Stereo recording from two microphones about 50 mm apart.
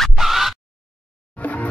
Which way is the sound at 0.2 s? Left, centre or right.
Centre.